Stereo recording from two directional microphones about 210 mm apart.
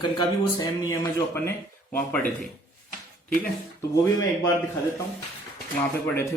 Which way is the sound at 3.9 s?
15° left (ahead or behind).